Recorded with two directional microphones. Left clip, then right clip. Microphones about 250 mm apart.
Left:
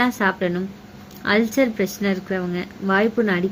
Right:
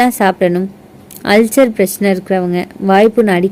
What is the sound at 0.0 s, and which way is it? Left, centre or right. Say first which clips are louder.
A woman's voice: right 9 dB; right.